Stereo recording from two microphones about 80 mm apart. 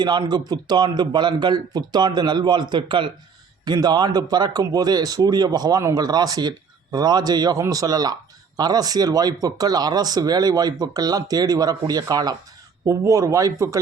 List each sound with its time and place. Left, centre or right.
0.0 s speech: right
3.6 s speech: right
12.8 s speech: right